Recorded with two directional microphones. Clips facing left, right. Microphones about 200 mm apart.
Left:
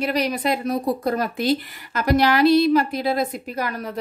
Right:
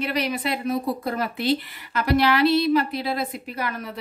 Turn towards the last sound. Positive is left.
turn(degrees=40)  # may be behind; listen again after turning